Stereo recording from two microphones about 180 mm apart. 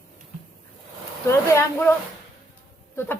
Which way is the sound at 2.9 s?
10° left (ahead or behind).